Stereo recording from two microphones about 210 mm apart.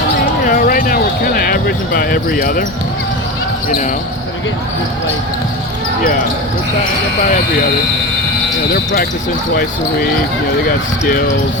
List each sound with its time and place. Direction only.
0.4 s basketball bounce: 40° left (ahead or behind)
8.7 s speech: 45° left (ahead or behind)